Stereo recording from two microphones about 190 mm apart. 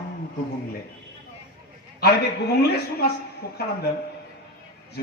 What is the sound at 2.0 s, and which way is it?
A man's voice, 60° left (ahead or behind).